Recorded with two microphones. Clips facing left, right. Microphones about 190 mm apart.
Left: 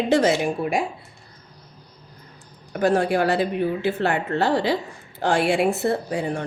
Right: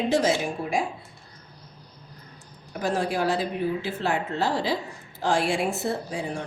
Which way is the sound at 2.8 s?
60° left (ahead or behind).